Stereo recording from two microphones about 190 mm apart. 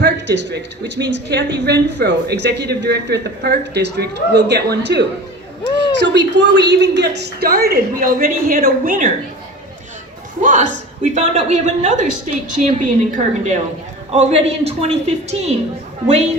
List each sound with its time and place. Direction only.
0.0 s speech: 65° right (ahead or behind); by 9.0 s 45° right (ahead or behind)
10.4 s a woman's voice: 40° right (ahead or behind)